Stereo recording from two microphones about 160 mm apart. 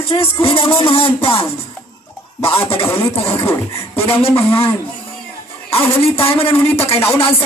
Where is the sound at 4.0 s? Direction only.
35° left (ahead or behind).